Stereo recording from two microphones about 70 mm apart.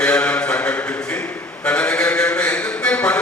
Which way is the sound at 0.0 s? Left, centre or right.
Centre.